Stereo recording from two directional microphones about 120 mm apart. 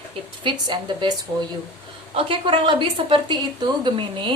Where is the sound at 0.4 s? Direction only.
40° right (ahead or behind).